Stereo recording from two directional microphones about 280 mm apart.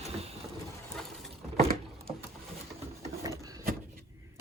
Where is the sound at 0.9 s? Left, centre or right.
Centre.